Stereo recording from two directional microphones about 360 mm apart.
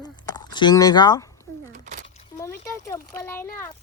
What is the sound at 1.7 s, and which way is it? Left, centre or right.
Speech, centre.